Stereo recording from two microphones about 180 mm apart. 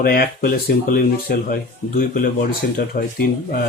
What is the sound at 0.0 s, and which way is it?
Speech, 55° left (ahead or behind).